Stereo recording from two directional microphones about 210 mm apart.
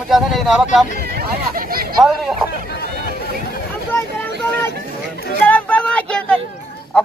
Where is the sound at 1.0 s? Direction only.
50° right (ahead or behind).